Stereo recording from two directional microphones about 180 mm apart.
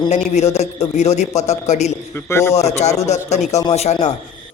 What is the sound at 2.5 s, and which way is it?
Speech, 35° left (ahead or behind).